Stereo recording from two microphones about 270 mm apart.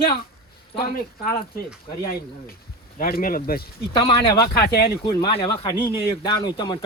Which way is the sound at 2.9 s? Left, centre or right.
Left.